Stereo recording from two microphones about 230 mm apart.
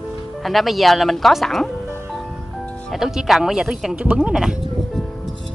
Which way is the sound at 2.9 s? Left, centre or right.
Centre.